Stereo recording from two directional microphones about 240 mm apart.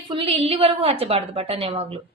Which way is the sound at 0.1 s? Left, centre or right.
Right.